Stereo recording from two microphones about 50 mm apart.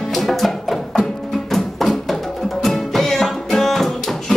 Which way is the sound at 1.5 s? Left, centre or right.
Centre.